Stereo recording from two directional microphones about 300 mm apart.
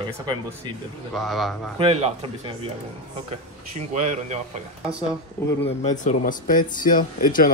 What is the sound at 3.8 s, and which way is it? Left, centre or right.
Speech, right.